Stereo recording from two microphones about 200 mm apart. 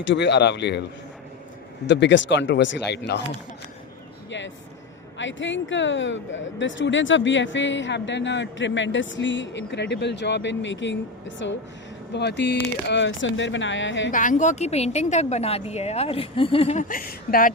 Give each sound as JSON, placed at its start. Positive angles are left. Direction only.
{"t": 0.0, "sound": "speech", "side_deg": 60}
{"t": 1.9, "sound": "speech", "side_deg": 60}
{"t": 4.3, "sound": "a sound", "side_deg": 65}
{"t": 5.1, "sound": "speech", "side_deg": 65}
{"t": 14.1, "sound": "a woman's voice", "side_deg": 40}
{"t": 16.9, "sound": "speech", "side_deg": 45}